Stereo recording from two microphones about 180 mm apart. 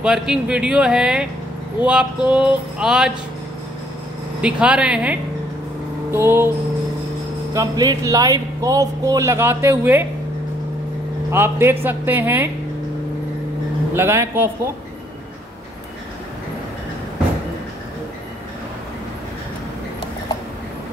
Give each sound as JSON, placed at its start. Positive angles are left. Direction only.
{"t": 0.0, "sound": "speech", "side_deg": -5}
{"t": 4.4, "sound": "speech", "side_deg": -5}
{"t": 7.5, "sound": "speech", "side_deg": -20}
{"t": 11.2, "sound": "speech", "side_deg": -15}
{"t": 13.9, "sound": "speech", "side_deg": -15}